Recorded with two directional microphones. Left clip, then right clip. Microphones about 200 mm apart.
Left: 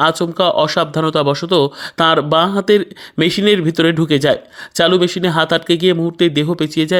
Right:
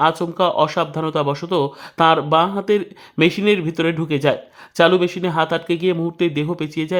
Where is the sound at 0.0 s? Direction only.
15° left (ahead or behind).